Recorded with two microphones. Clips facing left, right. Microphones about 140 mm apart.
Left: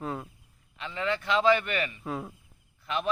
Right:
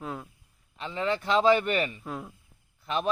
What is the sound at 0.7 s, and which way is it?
Speech, 30° right (ahead or behind).